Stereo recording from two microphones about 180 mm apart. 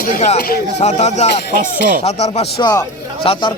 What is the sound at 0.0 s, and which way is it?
Speech, 45° left (ahead or behind).